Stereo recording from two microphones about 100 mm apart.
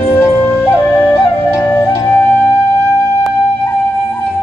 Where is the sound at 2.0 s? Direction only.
20° left (ahead or behind).